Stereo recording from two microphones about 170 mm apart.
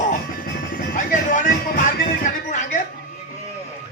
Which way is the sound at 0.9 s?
45° left (ahead or behind).